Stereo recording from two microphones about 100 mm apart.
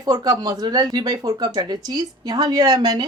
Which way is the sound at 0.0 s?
40° right (ahead or behind).